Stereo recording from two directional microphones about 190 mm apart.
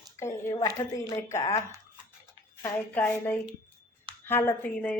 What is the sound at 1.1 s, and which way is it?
A woman's voice, 15° left (ahead or behind).